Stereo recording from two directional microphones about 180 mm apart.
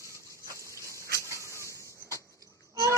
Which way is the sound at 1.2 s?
15° right (ahead or behind).